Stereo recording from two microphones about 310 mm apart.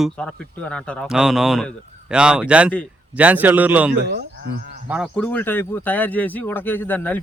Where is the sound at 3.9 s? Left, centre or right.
Right.